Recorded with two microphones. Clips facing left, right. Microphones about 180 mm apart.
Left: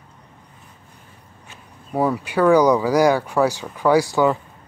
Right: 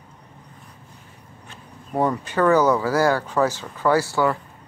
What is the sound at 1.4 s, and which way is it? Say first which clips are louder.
Speech: right 2 dB; 5° left (ahead or behind).